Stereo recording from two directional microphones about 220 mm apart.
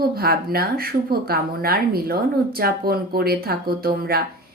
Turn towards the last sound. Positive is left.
turn(degrees=-45)  # may be behind; listen again after turning